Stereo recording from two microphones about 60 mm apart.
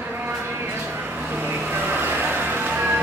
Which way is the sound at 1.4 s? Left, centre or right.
Right.